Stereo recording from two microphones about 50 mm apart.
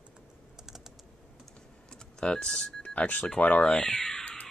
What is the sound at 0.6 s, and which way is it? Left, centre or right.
Typing, centre.